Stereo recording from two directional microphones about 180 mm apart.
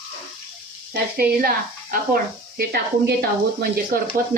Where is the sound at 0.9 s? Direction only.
60° right (ahead or behind).